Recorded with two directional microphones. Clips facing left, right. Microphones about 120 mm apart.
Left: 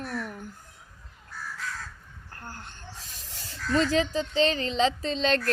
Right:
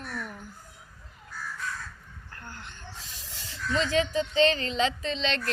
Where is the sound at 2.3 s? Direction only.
40° left (ahead or behind).